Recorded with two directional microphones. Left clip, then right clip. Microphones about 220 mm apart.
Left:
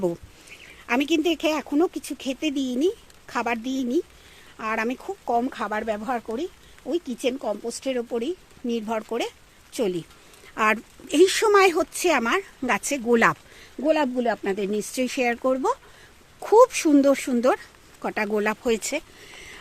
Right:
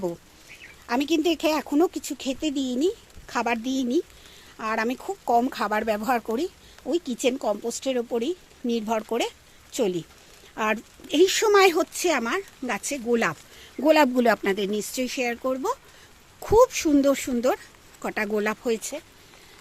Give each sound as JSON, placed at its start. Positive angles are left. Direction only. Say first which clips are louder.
{"t": 0.9, "sound": "speech", "louder": "left 1 dB", "side_deg": 5}
{"t": 13.7, "sound": "speech", "louder": "right 3 dB", "side_deg": -10}
{"t": 14.5, "sound": "speech", "louder": "even", "side_deg": 0}
{"t": 15.0, "sound": "speech", "louder": "left 5 dB", "side_deg": 15}
{"t": 18.8, "sound": "speech", "louder": "left 6 dB", "side_deg": 20}